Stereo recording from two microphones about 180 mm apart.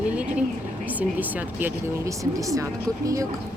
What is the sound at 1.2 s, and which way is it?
Speech, 10° right (ahead or behind).